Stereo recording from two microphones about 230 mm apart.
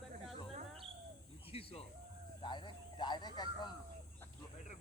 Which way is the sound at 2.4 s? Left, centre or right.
Centre.